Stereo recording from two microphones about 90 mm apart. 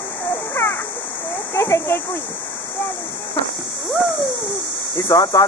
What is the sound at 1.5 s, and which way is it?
Speech, 30° left (ahead or behind).